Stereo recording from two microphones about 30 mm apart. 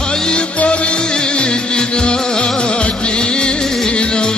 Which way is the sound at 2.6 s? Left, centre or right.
Left.